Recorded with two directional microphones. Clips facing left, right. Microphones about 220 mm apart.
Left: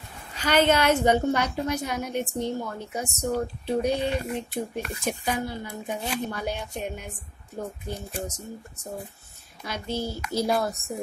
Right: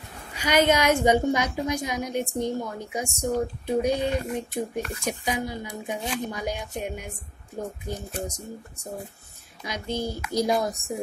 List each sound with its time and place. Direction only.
0.3 s a woman's voice: 10° right (ahead or behind)
9.6 s a woman's voice: 15° right (ahead or behind)